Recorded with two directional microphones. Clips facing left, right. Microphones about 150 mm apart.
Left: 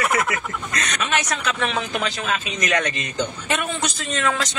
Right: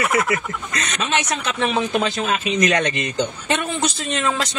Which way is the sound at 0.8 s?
25° right (ahead or behind).